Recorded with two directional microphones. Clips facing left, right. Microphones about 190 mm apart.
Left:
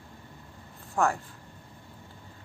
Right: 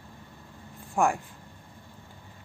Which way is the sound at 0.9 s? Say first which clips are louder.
Right 2 dB; 15° right (ahead or behind).